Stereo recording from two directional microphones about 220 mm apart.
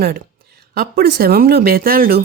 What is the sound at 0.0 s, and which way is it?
Speech, 45° right (ahead or behind).